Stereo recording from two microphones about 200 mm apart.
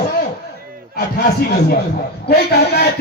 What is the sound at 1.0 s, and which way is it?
A man's voice, 50° left (ahead or behind).